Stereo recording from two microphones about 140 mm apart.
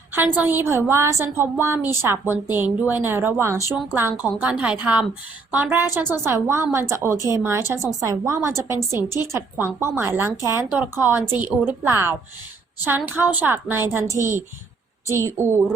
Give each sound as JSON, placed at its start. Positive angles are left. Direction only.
{"t": 0.1, "sound": "a woman's voice", "side_deg": -15}